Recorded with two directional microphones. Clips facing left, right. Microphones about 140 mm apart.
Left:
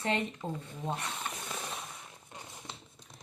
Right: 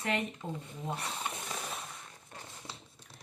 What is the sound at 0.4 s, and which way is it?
Speech, 25° left (ahead or behind).